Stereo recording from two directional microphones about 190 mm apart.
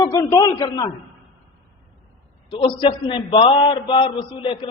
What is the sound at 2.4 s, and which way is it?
A man's voice, 25° left (ahead or behind).